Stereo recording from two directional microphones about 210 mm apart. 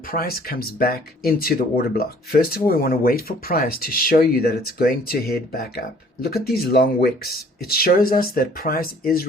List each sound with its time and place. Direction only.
0.1 s speech: 45° left (ahead or behind)